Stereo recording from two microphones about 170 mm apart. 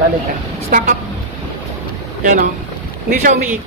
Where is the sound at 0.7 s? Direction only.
50° right (ahead or behind).